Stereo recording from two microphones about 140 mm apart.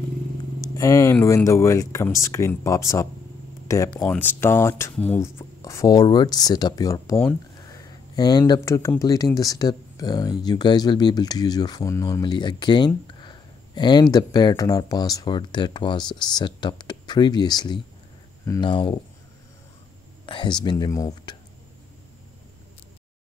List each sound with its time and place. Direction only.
0.7 s speech: 20° left (ahead or behind)
7.5 s a sound: 25° left (ahead or behind)
9.0 s speech: 25° left (ahead or behind)
20.2 s speech: 35° left (ahead or behind)